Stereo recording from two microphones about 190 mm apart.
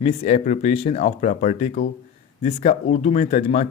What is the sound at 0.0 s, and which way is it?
Speech, 35° left (ahead or behind).